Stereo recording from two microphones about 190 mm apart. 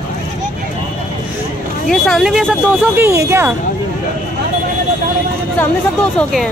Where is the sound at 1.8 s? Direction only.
Centre (ahead or behind).